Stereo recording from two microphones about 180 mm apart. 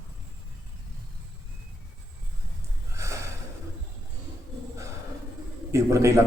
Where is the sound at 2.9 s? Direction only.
15° right (ahead or behind).